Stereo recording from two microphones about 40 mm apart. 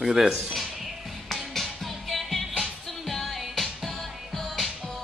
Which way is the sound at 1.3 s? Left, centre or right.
Centre.